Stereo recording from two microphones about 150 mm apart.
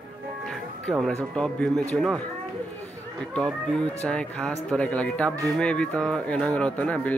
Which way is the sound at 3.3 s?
5° left (ahead or behind).